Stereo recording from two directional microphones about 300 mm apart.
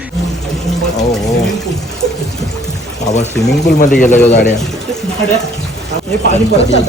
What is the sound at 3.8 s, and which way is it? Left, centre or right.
Speech, left.